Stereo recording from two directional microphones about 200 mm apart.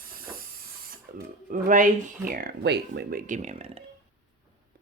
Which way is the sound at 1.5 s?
40° right (ahead or behind).